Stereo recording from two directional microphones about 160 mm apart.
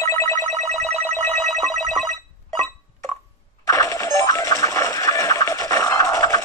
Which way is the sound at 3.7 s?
20° left (ahead or behind).